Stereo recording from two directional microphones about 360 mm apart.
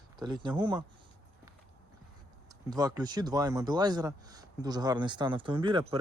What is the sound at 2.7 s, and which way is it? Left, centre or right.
Speech, centre.